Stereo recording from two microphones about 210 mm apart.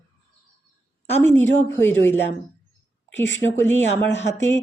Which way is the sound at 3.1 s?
60° left (ahead or behind).